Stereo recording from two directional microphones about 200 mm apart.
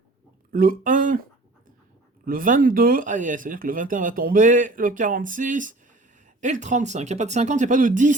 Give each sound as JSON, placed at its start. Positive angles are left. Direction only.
{"t": 0.5, "sound": "speech", "side_deg": -45}
{"t": 2.2, "sound": "speech", "side_deg": -45}